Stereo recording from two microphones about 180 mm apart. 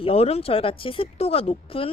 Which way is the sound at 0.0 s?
30° left (ahead or behind).